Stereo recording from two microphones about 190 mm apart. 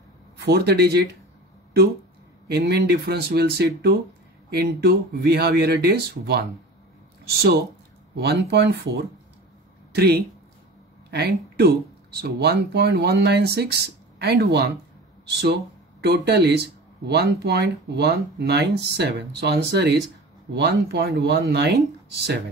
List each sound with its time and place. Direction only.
0.5 s speech: 60° right (ahead or behind)
2.4 s speech: 60° right (ahead or behind)
16.0 s speech: 60° right (ahead or behind)